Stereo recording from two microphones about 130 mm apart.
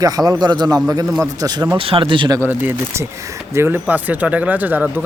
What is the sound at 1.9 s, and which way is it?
Speech, 40° right (ahead or behind).